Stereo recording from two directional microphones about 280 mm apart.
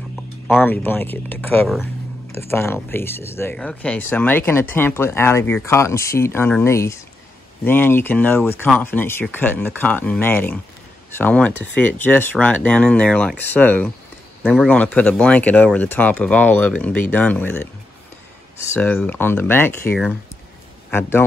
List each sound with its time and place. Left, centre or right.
0.1 s speech: centre
18.7 s speech: centre